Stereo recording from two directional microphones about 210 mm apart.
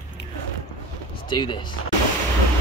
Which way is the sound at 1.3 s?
20° left (ahead or behind).